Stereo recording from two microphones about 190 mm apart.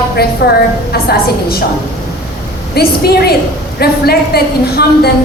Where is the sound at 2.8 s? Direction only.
55° left (ahead or behind).